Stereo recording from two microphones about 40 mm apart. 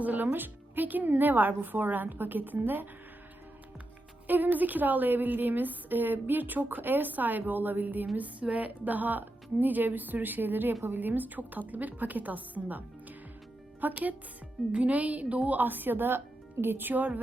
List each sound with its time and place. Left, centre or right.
0.0 s music: right
0.3 s a woman's voice: right
4.3 s a woman's voice: right
8.1 s a woman's voice: right
14.7 s a woman's voice: right